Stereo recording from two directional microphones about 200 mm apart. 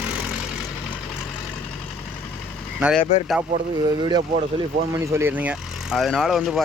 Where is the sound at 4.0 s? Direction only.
20° right (ahead or behind); by 6.6 s centre (ahead or behind).